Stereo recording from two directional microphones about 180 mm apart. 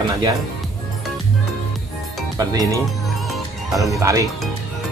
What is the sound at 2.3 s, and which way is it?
Speech, 20° right (ahead or behind).